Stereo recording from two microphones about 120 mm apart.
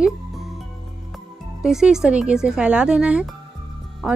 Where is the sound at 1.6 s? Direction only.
5° right (ahead or behind).